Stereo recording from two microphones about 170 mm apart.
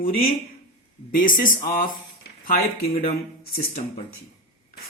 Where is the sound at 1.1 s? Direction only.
55° left (ahead or behind).